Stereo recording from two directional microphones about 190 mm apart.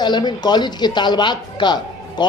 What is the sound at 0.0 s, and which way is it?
Speech, 20° left (ahead or behind).